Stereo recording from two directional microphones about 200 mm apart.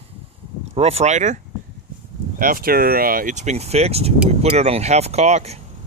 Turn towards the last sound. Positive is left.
turn(degrees=-35)  # may be behind; listen again after turning